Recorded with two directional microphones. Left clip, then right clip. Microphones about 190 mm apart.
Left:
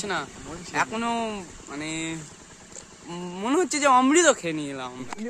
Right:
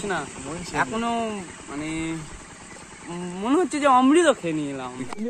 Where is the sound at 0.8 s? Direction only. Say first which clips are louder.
Right 1 dB; 30° left (ahead or behind).